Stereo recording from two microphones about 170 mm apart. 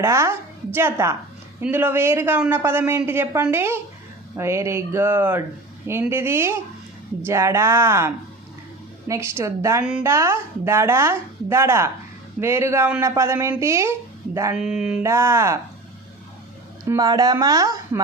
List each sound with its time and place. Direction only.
0.0 s a woman's voice: 15° right (ahead or behind)
14.5 s mantra: 5° right (ahead or behind)
15.0 s a woman's voice: 15° right (ahead or behind)
16.9 s speech: 20° right (ahead or behind)